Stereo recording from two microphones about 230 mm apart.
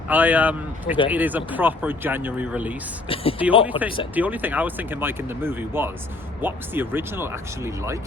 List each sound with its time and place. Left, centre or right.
0.1 s speech: centre
3.1 s speech: left
4.1 s speech: centre